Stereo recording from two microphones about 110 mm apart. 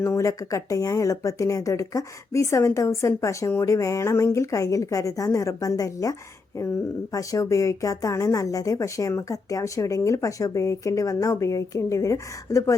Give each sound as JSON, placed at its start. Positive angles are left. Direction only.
{"t": 0.0, "sound": "speech", "side_deg": 25}